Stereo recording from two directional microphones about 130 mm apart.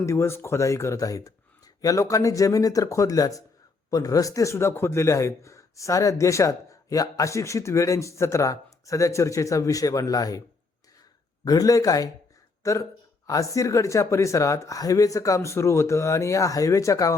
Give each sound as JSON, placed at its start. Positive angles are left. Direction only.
{"t": 0.0, "sound": "a man's voice", "side_deg": 20}
{"t": 11.4, "sound": "a man's voice", "side_deg": 30}